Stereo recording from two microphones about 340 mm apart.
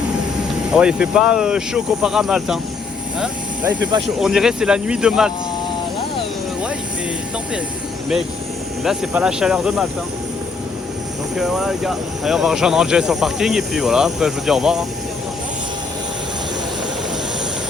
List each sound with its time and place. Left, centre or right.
0.7 s speech: centre
8.8 s speech: centre
11.3 s speech: centre